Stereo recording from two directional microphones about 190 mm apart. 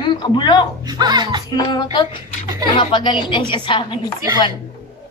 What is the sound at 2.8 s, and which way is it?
A woman's voice, 25° left (ahead or behind).